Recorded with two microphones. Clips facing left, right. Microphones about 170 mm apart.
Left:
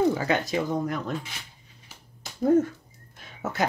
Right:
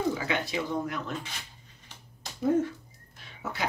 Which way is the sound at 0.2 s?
45° left (ahead or behind).